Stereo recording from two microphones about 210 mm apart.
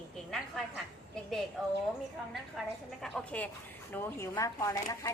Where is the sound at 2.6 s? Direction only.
Centre (ahead or behind).